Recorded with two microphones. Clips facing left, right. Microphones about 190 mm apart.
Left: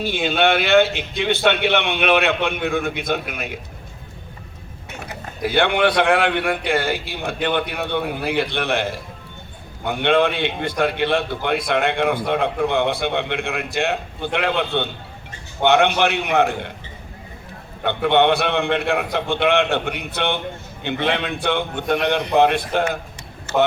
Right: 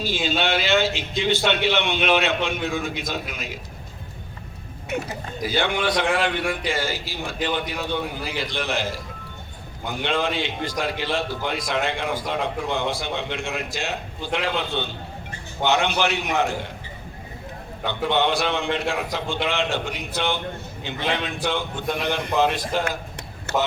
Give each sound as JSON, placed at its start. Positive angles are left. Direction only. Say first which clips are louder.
{"t": 0.0, "sound": "a man's voice", "louder": "left 5 dB", "side_deg": 60}
{"t": 5.4, "sound": "a man's voice", "louder": "left 6 dB", "side_deg": 60}
{"t": 17.8, "sound": "a man's voice", "louder": "left 6 dB", "side_deg": 60}
{"t": 23.5, "sound": "speech", "louder": "left 5 dB", "side_deg": -60}